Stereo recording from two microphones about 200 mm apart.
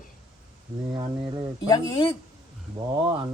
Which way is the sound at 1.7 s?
20° left (ahead or behind).